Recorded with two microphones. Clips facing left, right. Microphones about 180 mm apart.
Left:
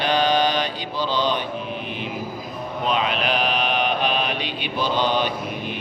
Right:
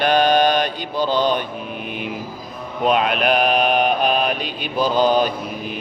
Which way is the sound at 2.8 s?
50° right (ahead or behind).